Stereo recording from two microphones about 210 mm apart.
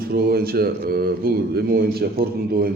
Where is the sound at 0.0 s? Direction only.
45° right (ahead or behind).